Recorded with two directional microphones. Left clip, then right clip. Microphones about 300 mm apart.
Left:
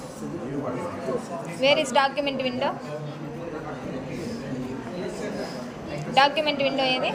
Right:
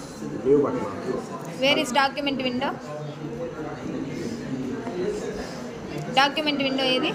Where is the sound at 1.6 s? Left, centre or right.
Centre.